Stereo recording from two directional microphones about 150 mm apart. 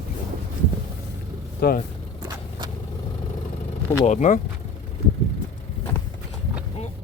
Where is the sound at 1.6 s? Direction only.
90° left.